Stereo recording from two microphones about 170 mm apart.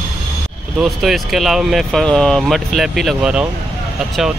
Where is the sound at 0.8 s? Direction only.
Centre (ahead or behind).